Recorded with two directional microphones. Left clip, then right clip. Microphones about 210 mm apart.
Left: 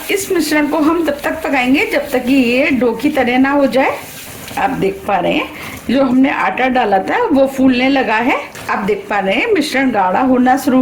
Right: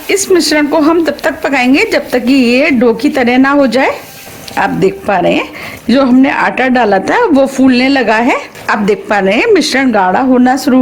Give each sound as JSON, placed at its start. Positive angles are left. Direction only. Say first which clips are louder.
{"t": 0.1, "sound": "speech", "louder": "right 6 dB", "side_deg": -50}